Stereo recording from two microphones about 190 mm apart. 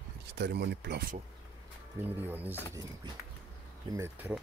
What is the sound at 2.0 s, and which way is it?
Speech, 10° right (ahead or behind).